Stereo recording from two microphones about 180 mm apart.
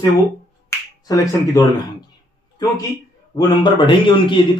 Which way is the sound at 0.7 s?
15° left (ahead or behind).